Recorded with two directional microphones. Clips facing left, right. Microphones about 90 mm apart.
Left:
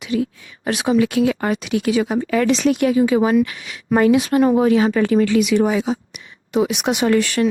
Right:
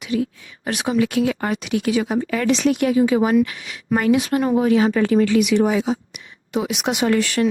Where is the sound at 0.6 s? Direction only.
20° left (ahead or behind).